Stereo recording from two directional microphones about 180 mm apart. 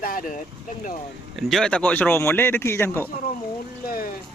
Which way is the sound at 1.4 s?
Centre (ahead or behind).